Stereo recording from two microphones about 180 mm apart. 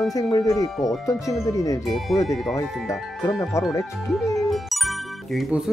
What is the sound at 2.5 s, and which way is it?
Speech, 15° left (ahead or behind).